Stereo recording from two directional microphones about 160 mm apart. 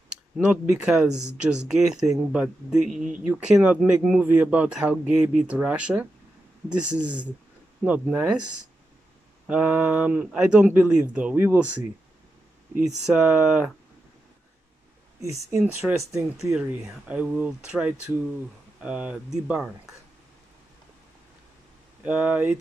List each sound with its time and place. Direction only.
0.4 s speech: 5° right (ahead or behind)
9.5 s speech: 10° right (ahead or behind)
13.0 s speech: 5° right (ahead or behind)
15.5 s speech: 20° right (ahead or behind)
16.5 s speech: 10° right (ahead or behind)
22.0 s speech: 10° right (ahead or behind)